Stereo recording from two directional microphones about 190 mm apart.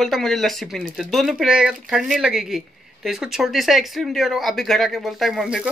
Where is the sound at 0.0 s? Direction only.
Centre (ahead or behind).